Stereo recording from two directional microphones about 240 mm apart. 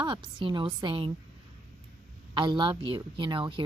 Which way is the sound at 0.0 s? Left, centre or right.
Centre.